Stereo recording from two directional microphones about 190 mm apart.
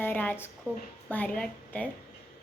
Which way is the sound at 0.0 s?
10° left (ahead or behind).